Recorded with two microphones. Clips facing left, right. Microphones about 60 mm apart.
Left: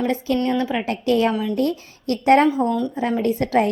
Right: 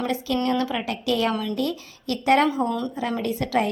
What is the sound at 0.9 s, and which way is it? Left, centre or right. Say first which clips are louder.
Speech: left 5 dB; left.